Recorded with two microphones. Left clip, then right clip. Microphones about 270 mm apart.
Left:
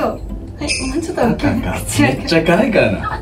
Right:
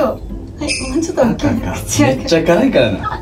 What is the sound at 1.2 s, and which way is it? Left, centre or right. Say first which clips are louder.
A woman's voice: right 1 dB; centre.